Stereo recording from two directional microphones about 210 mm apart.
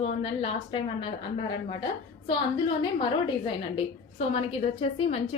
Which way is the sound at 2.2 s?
25° left (ahead or behind).